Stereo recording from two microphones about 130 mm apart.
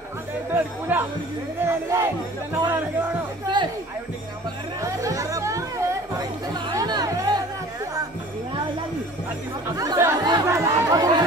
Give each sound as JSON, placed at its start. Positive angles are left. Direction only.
{"t": 0.5, "sound": "speech", "side_deg": -15}
{"t": 4.8, "sound": "chatter", "side_deg": -25}
{"t": 9.8, "sound": "chatter", "side_deg": -25}